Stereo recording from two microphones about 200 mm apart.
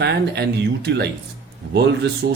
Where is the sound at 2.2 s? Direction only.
50° right (ahead or behind).